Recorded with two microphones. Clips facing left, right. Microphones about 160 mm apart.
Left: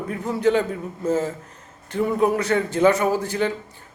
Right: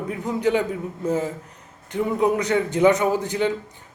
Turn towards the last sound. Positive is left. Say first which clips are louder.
# even
turn(degrees=-20)  # may be behind; listen again after turning